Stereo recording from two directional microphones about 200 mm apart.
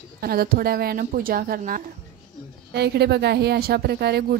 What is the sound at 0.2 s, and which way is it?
A woman's voice, 50° right (ahead or behind).